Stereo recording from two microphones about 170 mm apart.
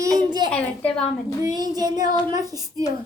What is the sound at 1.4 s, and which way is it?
A woman's voice, 20° right (ahead or behind).